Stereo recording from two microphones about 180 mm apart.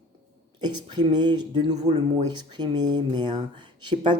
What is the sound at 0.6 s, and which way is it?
Speech, 25° right (ahead or behind).